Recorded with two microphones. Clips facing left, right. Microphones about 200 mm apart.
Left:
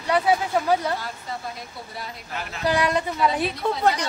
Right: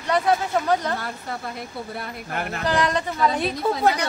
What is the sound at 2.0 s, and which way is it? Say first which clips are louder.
Speech: right 2 dB; 55° right (ahead or behind).